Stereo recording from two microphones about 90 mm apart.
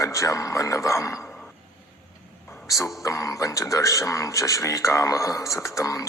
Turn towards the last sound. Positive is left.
turn(degrees=35)  # may be behind; listen again after turning